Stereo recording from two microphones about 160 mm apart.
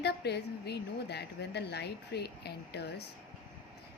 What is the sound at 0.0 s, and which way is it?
A woman's voice, 90° left.